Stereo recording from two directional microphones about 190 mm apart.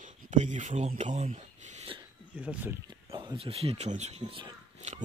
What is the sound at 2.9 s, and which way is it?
Speech, 25° right (ahead or behind).